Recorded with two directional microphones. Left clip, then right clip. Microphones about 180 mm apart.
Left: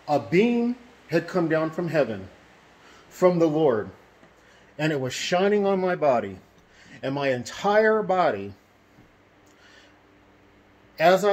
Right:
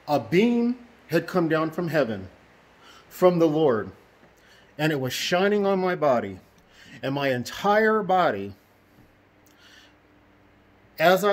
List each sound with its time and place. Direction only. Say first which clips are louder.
0.0 s speech: even; 25° right (ahead or behind)
3.2 s speech: right 1 dB; 35° right (ahead or behind)
11.0 s speech: left 1 dB; 30° right (ahead or behind)